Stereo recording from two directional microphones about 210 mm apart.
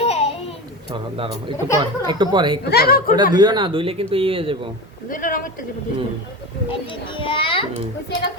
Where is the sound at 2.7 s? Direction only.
45° left (ahead or behind).